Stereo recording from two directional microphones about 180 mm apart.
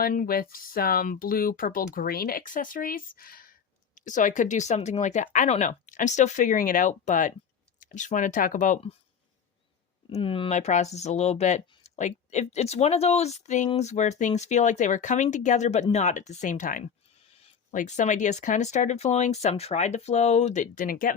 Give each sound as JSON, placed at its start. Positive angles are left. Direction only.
{"t": 0.0, "sound": "speech", "side_deg": 50}
{"t": 10.1, "sound": "speech", "side_deg": 30}